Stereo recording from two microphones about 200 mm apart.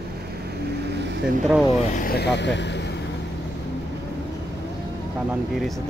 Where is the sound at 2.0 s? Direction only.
50° left (ahead or behind).